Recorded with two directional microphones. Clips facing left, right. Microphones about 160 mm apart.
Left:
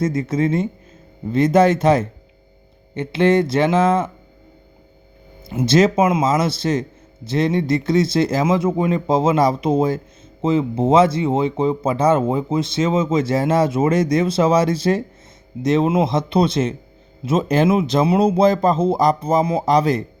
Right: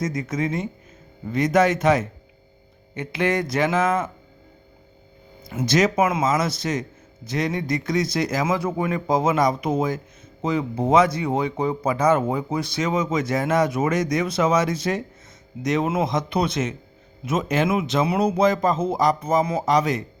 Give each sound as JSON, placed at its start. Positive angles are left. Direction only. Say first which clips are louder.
{"t": 0.0, "sound": "a man's voice", "louder": "left 6 dB", "side_deg": 30}
{"t": 5.5, "sound": "a man's voice", "louder": "left 5 dB", "side_deg": 30}